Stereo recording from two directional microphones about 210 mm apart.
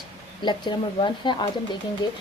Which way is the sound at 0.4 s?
20° left (ahead or behind).